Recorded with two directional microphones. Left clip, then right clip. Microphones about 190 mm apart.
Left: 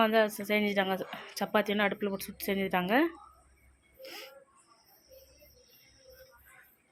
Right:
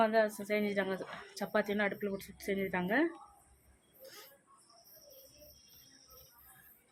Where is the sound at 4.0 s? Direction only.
15° left (ahead or behind).